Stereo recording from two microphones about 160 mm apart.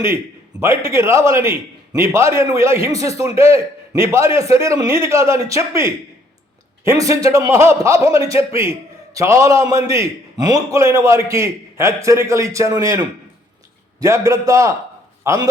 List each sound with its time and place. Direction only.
0.6 s a man's voice: 15° right (ahead or behind)